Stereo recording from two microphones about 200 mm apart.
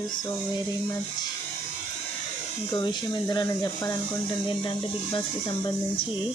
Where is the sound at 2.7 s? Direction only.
20° left (ahead or behind).